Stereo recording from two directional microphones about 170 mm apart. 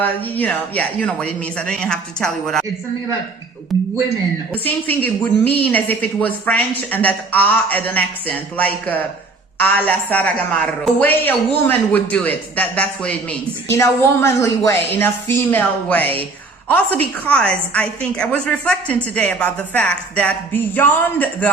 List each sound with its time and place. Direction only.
0.0 s speech: 10° left (ahead or behind)
4.5 s a woman's voice: 10° left (ahead or behind)